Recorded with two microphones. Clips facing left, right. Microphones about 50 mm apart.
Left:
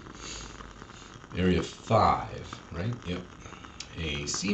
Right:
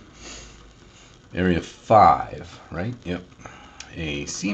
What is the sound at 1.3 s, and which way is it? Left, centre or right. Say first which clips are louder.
Speech: right 5 dB; right.